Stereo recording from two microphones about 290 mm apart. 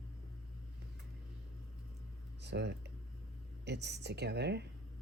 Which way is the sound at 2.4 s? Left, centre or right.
Right.